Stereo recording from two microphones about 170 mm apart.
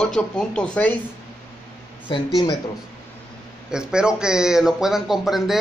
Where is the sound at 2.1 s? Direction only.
30° left (ahead or behind).